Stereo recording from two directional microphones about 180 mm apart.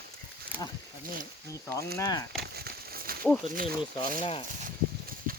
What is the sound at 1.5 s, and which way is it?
Speech, 15° left (ahead or behind).